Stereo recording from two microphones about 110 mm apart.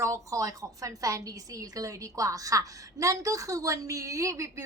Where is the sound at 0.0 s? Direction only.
30° right (ahead or behind).